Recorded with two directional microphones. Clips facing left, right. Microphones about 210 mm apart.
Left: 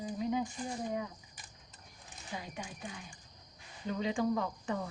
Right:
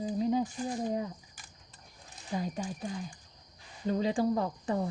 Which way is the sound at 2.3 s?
40° right (ahead or behind).